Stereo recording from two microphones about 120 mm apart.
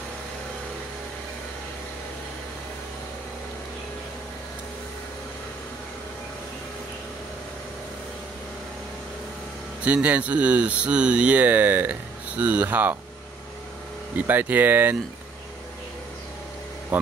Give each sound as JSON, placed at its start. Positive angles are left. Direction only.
{"t": 9.8, "sound": "speech", "side_deg": -10}
{"t": 14.1, "sound": "speech", "side_deg": -15}